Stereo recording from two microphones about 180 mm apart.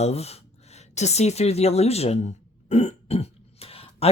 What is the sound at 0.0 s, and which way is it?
Speech, 35° left (ahead or behind).